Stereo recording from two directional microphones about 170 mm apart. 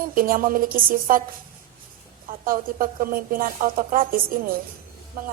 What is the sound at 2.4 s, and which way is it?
A woman's voice, 55° right (ahead or behind).